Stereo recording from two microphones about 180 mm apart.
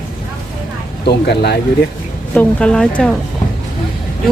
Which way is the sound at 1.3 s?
65° left (ahead or behind).